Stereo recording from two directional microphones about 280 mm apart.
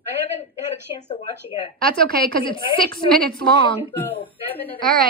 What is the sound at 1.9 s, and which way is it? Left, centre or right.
Speech, right.